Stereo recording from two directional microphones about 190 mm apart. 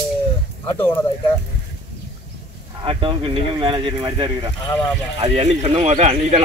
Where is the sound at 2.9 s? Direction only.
25° right (ahead or behind).